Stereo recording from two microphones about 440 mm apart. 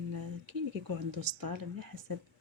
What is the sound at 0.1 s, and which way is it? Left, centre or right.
Speech, right.